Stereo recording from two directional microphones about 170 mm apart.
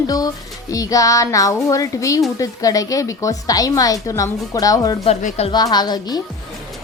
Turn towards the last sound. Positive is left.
turn(degrees=25)  # may be behind; listen again after turning